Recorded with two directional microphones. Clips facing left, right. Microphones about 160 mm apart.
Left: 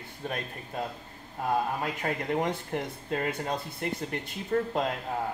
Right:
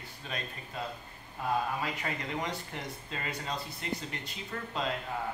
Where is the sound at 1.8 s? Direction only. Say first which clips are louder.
Left 4 dB; 50° left (ahead or behind).